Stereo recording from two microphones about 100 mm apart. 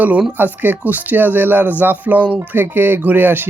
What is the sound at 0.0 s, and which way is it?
Speech, 15° right (ahead or behind).